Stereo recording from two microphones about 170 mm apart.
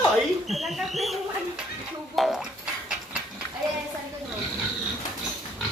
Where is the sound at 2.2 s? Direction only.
Centre (ahead or behind).